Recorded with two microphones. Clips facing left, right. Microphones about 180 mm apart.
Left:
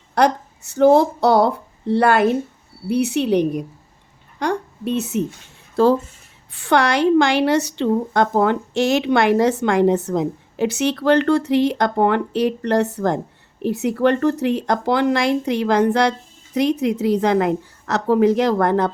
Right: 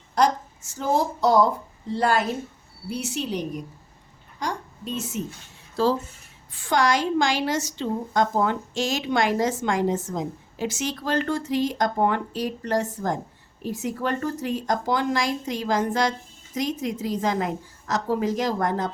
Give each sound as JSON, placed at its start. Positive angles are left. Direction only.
{"t": 0.1, "sound": "a woman's voice", "side_deg": 65}
{"t": 6.5, "sound": "a woman's voice", "side_deg": 70}